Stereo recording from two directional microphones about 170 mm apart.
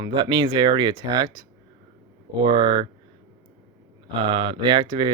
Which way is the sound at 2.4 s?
30° right (ahead or behind).